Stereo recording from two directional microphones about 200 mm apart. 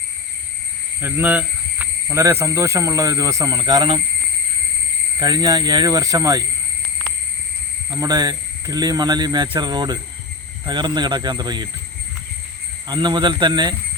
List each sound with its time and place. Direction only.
1.0 s speech: 10° right (ahead or behind)
5.2 s speech: 20° right (ahead or behind)
7.9 s speech: 20° right (ahead or behind)
12.9 s speech: 20° right (ahead or behind)